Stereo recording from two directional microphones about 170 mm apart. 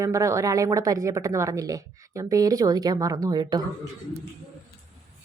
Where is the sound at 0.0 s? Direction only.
20° right (ahead or behind).